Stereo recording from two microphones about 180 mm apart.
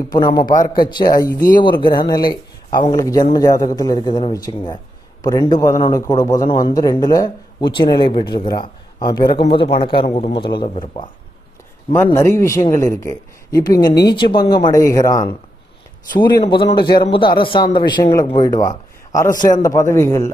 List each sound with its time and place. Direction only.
0.1 s a man's voice: 20° left (ahead or behind)
11.9 s a man's voice: 15° left (ahead or behind)